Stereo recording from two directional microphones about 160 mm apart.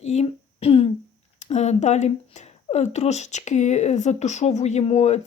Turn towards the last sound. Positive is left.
turn(degrees=45)  # may be behind; listen again after turning